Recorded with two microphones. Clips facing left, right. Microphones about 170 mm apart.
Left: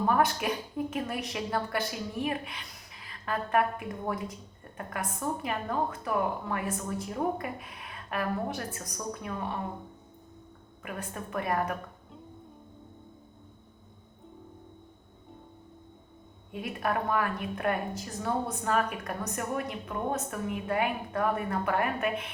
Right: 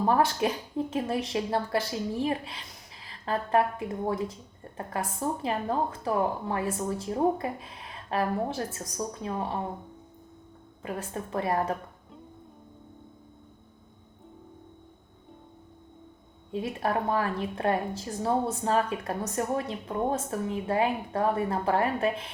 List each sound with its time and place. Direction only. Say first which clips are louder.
0.0 s a woman's voice: right 2 dB; 30° right (ahead or behind)
10.8 s a woman's voice: right 4 dB; 30° right (ahead or behind)
16.5 s a woman's voice: right 3 dB; 30° right (ahead or behind)